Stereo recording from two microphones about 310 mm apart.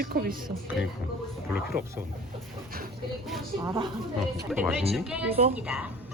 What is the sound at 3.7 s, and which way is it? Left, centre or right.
Speech, centre.